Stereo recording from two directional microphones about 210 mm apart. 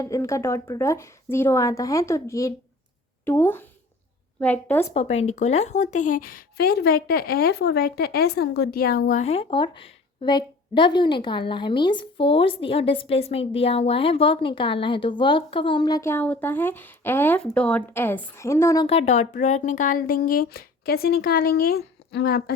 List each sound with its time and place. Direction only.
0.0 s a woman's voice: 15° left (ahead or behind)
4.9 s speech: 30° left (ahead or behind); by 18.9 s 15° left (ahead or behind)
18.9 s speech: 30° left (ahead or behind); by 22.5 s 45° left (ahead or behind)